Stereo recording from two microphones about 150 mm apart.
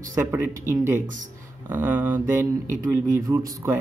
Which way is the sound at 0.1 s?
20° right (ahead or behind).